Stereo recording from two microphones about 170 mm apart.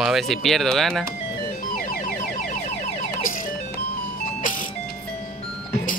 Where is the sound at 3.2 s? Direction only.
55° left (ahead or behind).